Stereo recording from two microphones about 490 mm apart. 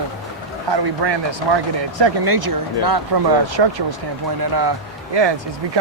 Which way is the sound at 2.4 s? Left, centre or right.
Right.